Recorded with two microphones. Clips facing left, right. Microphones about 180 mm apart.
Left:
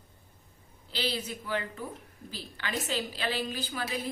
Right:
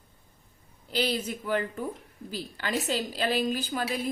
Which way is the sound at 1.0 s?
45° right (ahead or behind).